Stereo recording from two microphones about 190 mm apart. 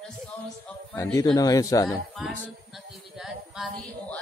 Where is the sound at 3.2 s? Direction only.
Centre (ahead or behind).